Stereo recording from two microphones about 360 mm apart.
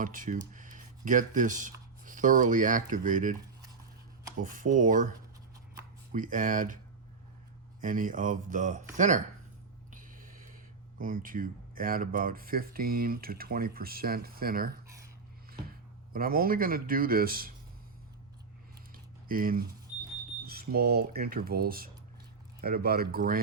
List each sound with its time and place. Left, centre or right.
0.0 s speech: right
4.4 s speech: right
6.1 s speech: right
7.8 s speech: right
9.9 s a sound: right
10.9 s speech: right
16.1 s speech: right
18.9 s a sound: right
20.5 s speech: right